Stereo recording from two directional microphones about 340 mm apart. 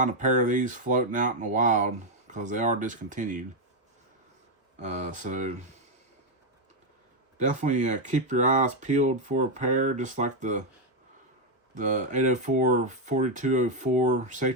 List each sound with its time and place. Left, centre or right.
0.0 s speech: right
4.8 s speech: right
7.3 s speech: right
11.7 s speech: right